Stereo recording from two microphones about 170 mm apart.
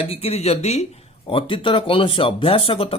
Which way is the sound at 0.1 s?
35° left (ahead or behind).